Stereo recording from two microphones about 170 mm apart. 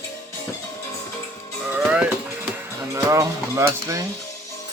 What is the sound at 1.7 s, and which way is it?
Music, 5° right (ahead or behind).